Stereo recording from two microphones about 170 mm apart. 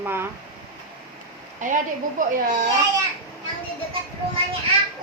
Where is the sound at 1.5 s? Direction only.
50° right (ahead or behind).